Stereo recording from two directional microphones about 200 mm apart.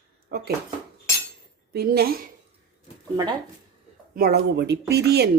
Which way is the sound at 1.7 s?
50° right (ahead or behind).